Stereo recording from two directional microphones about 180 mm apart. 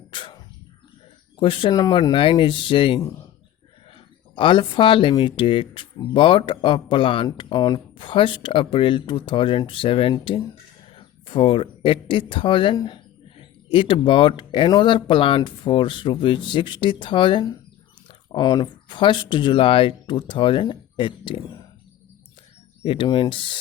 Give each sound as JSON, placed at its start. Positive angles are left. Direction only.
{"t": 0.1, "sound": "a sound", "side_deg": 25}
{"t": 1.4, "sound": "speech", "side_deg": 25}
{"t": 22.8, "sound": "speech", "side_deg": 30}